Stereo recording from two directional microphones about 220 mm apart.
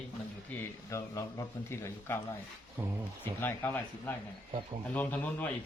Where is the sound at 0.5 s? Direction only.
10° left (ahead or behind).